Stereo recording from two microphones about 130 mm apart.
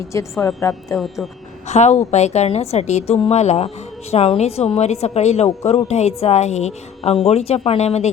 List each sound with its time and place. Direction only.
0.1 s a woman's voice: 25° left (ahead or behind)
0.9 s speech: centre (ahead or behind)
1.6 s speech: 60° left (ahead or behind)